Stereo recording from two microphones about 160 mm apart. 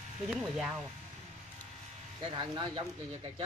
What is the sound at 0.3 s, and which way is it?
Speech, centre (ahead or behind).